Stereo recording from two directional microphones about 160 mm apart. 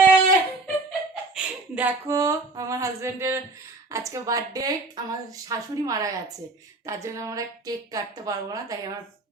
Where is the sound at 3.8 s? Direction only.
20° right (ahead or behind).